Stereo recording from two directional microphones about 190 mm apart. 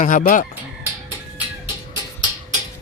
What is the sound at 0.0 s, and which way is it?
Speech, 40° left (ahead or behind).